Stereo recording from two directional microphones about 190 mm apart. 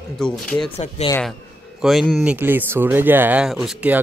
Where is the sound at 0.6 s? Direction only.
35° left (ahead or behind).